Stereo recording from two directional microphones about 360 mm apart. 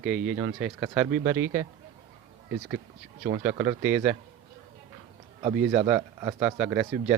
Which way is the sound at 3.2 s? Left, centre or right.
Right.